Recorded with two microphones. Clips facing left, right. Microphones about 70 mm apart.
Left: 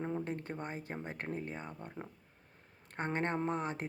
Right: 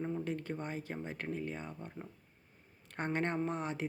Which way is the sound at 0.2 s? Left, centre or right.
Left.